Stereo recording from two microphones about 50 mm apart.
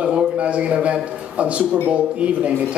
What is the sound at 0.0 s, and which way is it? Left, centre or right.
A man's voice, centre.